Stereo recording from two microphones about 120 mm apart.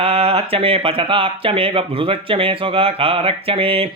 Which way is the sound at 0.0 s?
55° right (ahead or behind).